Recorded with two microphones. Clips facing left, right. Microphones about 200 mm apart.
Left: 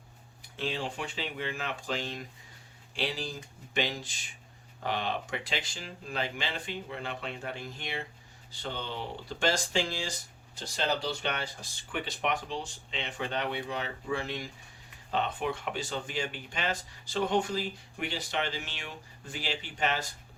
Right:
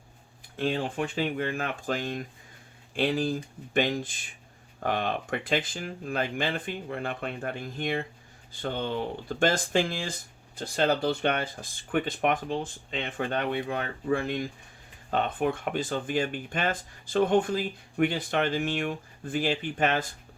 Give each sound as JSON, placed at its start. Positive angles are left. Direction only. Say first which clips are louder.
{"t": 0.5, "sound": "speech", "louder": "right 6 dB", "side_deg": -50}